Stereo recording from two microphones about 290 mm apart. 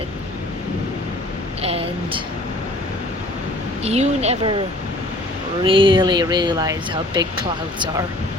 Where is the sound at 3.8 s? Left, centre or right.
Right.